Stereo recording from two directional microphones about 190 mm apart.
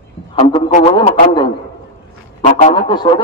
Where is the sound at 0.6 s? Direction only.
40° left (ahead or behind).